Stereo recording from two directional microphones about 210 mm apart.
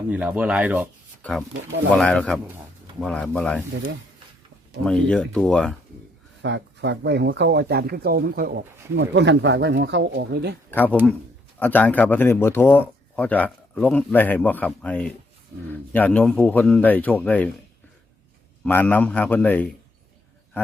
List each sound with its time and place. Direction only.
0.1 s speech: 5° right (ahead or behind)
4.9 s speech: centre (ahead or behind)
6.4 s speech: 60° right (ahead or behind)
10.7 s speech: 10° left (ahead or behind)
18.6 s speech: 10° left (ahead or behind)